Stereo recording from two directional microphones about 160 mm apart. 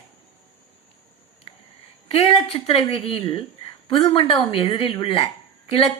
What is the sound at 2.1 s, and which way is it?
Speech, 35° left (ahead or behind).